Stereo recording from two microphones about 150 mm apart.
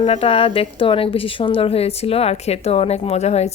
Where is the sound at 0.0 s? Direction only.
40° left (ahead or behind).